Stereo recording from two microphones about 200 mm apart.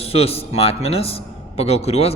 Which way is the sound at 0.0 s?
30° left (ahead or behind).